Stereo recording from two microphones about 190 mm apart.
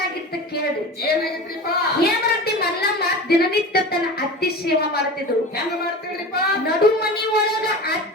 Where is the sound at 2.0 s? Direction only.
55° left (ahead or behind).